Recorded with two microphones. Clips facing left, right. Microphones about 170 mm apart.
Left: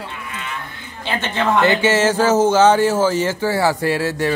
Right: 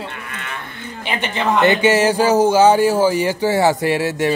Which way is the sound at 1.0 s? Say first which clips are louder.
Even; 15° right (ahead or behind).